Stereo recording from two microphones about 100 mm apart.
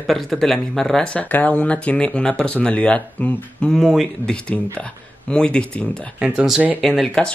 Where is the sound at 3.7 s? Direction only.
Centre (ahead or behind).